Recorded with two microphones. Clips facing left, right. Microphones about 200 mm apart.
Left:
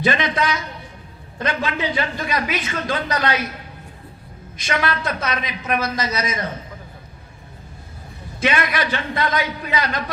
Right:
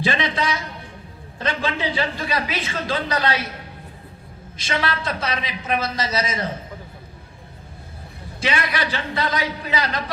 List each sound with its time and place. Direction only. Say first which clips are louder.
0.0 s speech: left 2 dB; 30° right (ahead or behind)
4.5 s speech: left 2 dB; 30° right (ahead or behind)
8.4 s a man's voice: left 3 dB; 30° right (ahead or behind)